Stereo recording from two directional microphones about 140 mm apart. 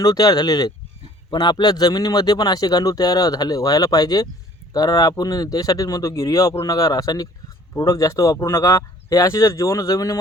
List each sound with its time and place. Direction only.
0.0 s speech: 25° left (ahead or behind)